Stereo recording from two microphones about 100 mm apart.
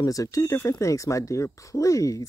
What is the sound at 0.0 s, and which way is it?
Speech, 35° left (ahead or behind).